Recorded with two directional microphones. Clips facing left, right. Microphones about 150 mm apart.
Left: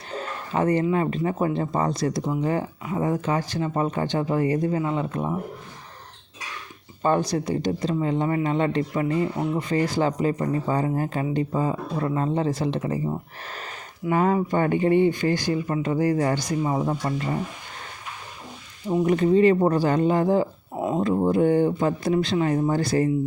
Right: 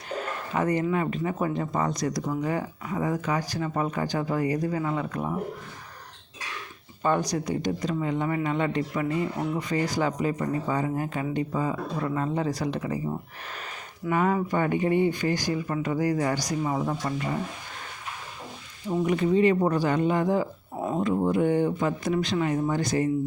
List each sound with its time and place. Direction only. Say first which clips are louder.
0.1 s speech: left 1 dB; 30° left (ahead or behind)
7.0 s speech: left 3 dB; 30° left (ahead or behind)
14.1 s speech: left 3 dB; 30° left (ahead or behind)
19.0 s speech: left 4 dB; 40° left (ahead or behind)